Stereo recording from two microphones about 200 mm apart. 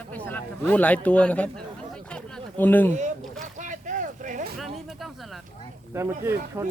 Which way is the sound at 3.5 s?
40° right (ahead or behind).